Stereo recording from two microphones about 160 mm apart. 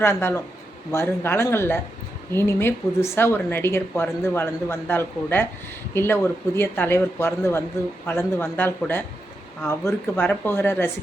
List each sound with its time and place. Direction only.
0.0 s speech: 15° left (ahead or behind)